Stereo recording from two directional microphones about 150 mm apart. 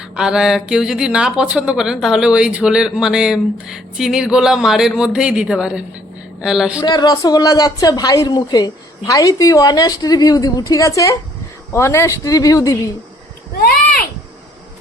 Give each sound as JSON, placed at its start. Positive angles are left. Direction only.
{"t": 0.2, "sound": "speech", "side_deg": -5}
{"t": 6.7, "sound": "speech", "side_deg": 25}
{"t": 13.6, "sound": "a sound", "side_deg": 85}